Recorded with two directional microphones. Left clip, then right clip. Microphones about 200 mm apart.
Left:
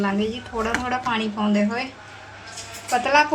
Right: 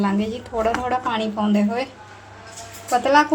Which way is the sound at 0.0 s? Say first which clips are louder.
Even; 55° right (ahead or behind).